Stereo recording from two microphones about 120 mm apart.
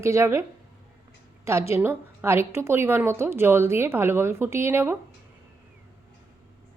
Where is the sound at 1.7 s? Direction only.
20° right (ahead or behind).